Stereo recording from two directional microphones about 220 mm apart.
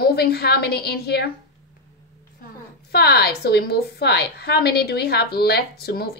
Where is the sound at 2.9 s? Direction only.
45° left (ahead or behind).